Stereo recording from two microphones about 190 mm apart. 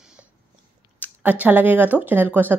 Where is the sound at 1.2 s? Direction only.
10° right (ahead or behind).